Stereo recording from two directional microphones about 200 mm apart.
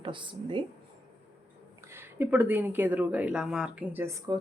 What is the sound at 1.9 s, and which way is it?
A woman's voice, 10° right (ahead or behind).